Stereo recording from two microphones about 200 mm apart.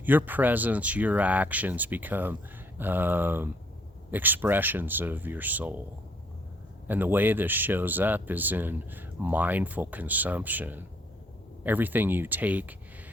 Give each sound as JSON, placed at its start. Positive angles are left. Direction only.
{"t": 0.0, "sound": "speech", "side_deg": -10}
{"t": 6.8, "sound": "speech", "side_deg": -10}